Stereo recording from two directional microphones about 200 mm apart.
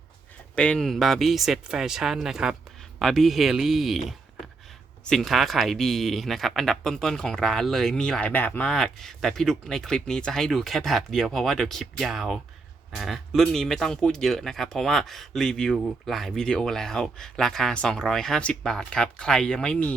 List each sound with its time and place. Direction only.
0.5 s speech: 5° left (ahead or behind)
5.0 s speech: centre (ahead or behind)